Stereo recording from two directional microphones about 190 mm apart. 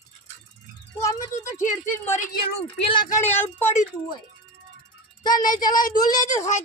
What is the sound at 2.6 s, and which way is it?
Speech, 30° left (ahead or behind).